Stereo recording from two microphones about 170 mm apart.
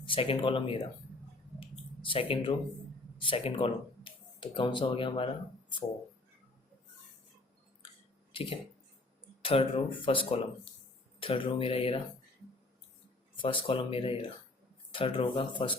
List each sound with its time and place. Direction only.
0.1 s speech: 30° left (ahead or behind)
1.5 s a sound: 30° left (ahead or behind)
3.2 s speech: 30° left (ahead or behind)
8.3 s a sound: 30° left (ahead or behind)
9.4 s speech: 30° left (ahead or behind)
13.3 s speech: 30° left (ahead or behind)